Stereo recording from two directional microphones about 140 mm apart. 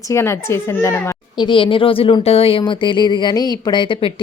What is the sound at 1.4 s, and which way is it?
A child's voice, 35° left (ahead or behind).